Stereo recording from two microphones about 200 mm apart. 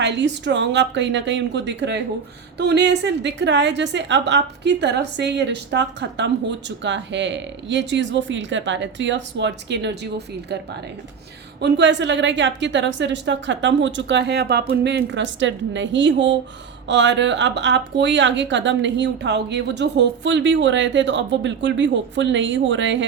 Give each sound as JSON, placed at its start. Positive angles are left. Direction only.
{"t": 0.0, "sound": "a woman's voice", "side_deg": -60}
{"t": 11.6, "sound": "a woman's voice", "side_deg": -60}